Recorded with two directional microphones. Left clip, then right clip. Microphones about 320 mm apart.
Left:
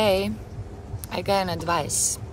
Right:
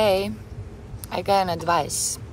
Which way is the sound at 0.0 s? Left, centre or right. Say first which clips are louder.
Right 1 dB; centre.